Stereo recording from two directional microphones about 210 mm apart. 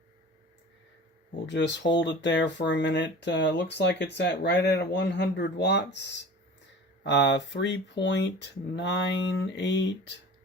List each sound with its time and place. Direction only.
1.5 s speech: 55° left (ahead or behind)